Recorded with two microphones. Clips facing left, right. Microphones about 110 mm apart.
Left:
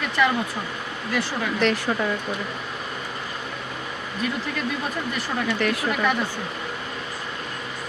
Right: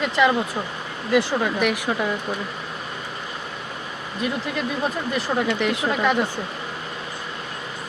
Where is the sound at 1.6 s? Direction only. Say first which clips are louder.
Even; 10° right (ahead or behind).